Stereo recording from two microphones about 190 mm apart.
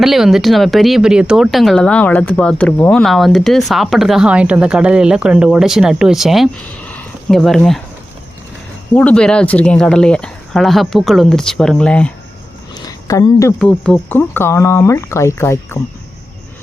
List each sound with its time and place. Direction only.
0.0 s speech: centre (ahead or behind)
9.0 s speech: 5° left (ahead or behind)
12.7 s a sound: 20° left (ahead or behind)
13.6 s speech: 5° left (ahead or behind)